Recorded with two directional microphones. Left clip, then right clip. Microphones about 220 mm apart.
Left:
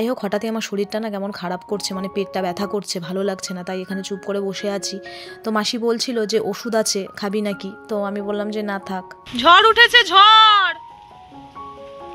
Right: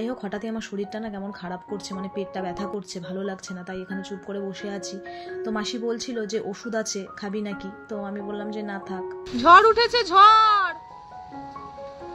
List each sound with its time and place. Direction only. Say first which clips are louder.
0.0 s speech: left 9 dB; 50° left (ahead or behind)
9.5 s speech: left 4 dB; centre (ahead or behind)